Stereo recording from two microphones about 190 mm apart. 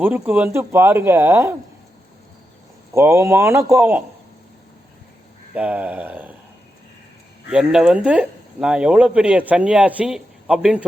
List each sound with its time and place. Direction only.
0.0 s speech: 10° right (ahead or behind)
2.9 s speech: 15° right (ahead or behind)
5.5 s speech: 10° right (ahead or behind)
7.5 s speech: 5° right (ahead or behind)